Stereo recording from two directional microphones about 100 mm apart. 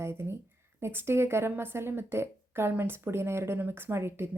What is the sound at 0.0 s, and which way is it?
A woman's voice, 25° right (ahead or behind).